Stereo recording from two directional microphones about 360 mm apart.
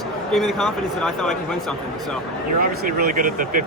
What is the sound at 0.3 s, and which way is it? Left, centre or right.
Speech, centre.